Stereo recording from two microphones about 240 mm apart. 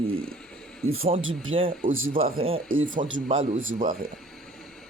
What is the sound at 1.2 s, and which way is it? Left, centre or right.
Speech, right.